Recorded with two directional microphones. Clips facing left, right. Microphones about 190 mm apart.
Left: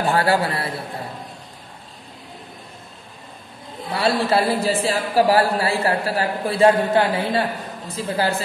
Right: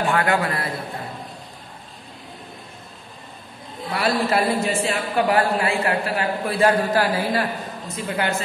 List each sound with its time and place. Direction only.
0.0 s a man's voice: 35° left (ahead or behind)
3.9 s a man's voice: 30° left (ahead or behind)